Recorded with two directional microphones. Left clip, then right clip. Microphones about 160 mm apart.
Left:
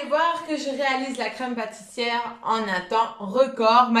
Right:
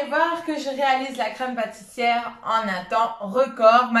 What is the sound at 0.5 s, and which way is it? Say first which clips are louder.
A woman's voice: right 3 dB; 30° left (ahead or behind).